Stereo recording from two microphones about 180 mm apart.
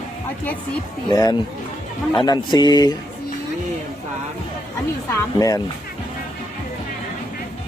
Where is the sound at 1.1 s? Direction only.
20° left (ahead or behind).